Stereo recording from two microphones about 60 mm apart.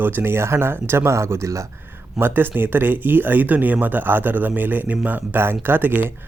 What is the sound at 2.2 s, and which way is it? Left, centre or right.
Speech, right.